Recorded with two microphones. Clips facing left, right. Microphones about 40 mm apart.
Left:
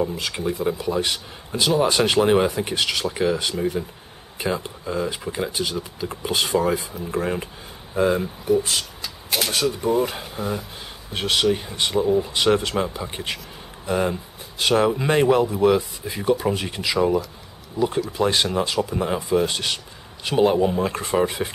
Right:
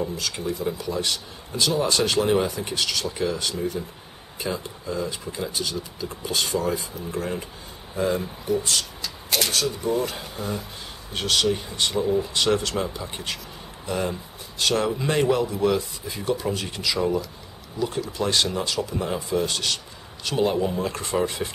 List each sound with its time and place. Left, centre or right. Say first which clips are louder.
0.0 s speech: left 4 dB; left